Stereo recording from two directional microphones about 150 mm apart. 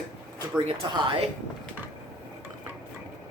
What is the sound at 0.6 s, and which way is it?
Speech, 35° right (ahead or behind).